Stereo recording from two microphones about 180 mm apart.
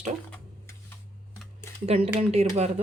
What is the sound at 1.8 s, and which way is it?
Speech, 35° right (ahead or behind).